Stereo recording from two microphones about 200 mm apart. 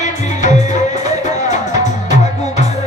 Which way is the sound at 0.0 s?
35° left (ahead or behind).